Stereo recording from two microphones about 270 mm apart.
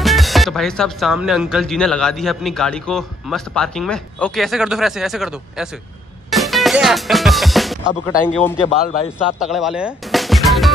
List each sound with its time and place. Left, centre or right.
0.0 s speech: centre
6.3 s music: centre
8.6 s a man's voice: left
9.2 s music: centre